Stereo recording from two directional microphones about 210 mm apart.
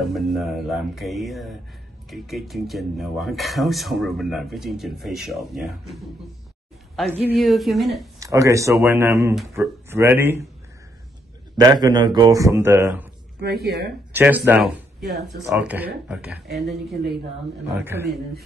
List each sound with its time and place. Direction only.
0.0 s speech: centre (ahead or behind)
7.1 s speech: 10° right (ahead or behind)
8.2 s a man's voice: 15° right (ahead or behind)
9.3 s speech: centre (ahead or behind)
9.8 s a man's voice: 10° right (ahead or behind)
11.5 s a man's voice: 20° right (ahead or behind)
13.4 s speech: 55° right (ahead or behind)
14.1 s a man's voice: 10° right (ahead or behind)